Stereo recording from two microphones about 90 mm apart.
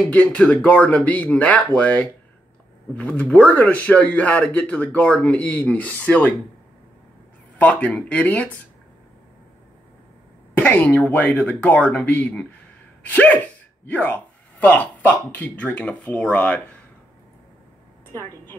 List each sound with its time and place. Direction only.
0.1 s a man's voice: 15° left (ahead or behind)
7.8 s a man's voice: 15° left (ahead or behind)
10.5 s cough: 20° left (ahead or behind)
11.0 s a man's voice: 15° left (ahead or behind)